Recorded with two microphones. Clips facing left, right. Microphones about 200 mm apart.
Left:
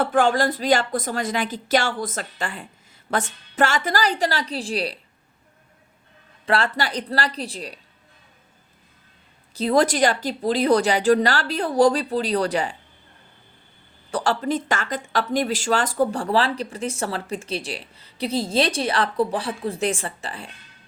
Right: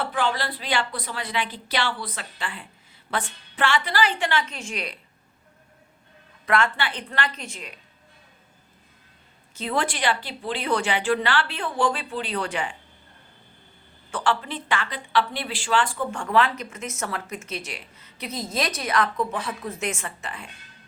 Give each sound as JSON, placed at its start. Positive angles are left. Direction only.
{"t": 0.0, "sound": "speech", "side_deg": 45}
{"t": 6.4, "sound": "speech", "side_deg": 35}
{"t": 9.6, "sound": "speech", "side_deg": 40}
{"t": 14.1, "sound": "speech", "side_deg": 40}